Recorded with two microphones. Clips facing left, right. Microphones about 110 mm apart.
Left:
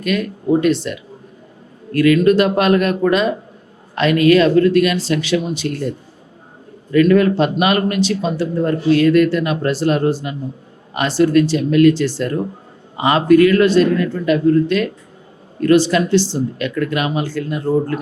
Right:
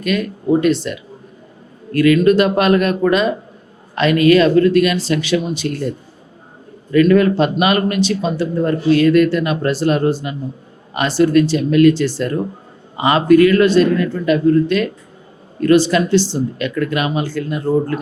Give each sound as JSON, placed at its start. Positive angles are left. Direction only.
{"t": 0.0, "sound": "speech", "side_deg": -20}
{"t": 6.9, "sound": "speech", "side_deg": -25}